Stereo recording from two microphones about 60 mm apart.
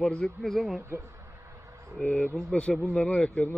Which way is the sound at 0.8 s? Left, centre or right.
Right.